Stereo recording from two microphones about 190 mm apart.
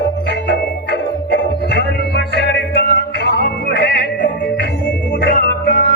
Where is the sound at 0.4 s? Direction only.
60° left (ahead or behind).